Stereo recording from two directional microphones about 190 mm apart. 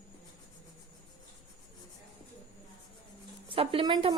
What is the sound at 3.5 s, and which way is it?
Speech, 30° right (ahead or behind).